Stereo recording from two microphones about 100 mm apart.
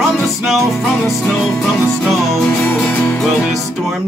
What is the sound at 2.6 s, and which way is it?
Music, 15° left (ahead or behind).